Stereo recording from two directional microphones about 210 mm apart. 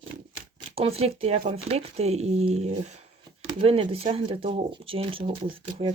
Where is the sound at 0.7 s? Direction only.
30° right (ahead or behind).